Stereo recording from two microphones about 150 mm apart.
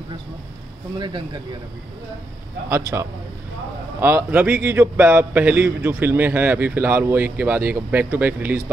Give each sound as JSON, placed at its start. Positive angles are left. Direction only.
{"t": 0.9, "sound": "speech", "side_deg": -30}
{"t": 2.7, "sound": "a man's voice", "side_deg": -20}